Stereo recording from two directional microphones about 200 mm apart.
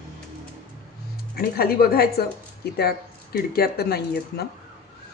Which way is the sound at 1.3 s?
50° left (ahead or behind).